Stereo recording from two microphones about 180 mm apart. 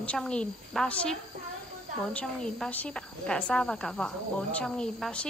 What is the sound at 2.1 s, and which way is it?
A woman's voice, 5° left (ahead or behind).